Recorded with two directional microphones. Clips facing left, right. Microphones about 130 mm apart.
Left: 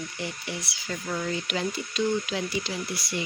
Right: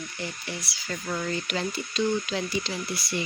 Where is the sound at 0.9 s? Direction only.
Centre (ahead or behind).